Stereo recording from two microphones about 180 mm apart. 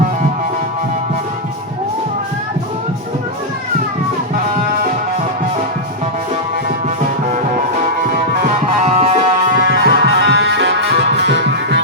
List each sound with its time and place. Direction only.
8.8 s music: 35° right (ahead or behind)
9.6 s music: 60° right (ahead or behind); by 11.8 s 75° right (ahead or behind)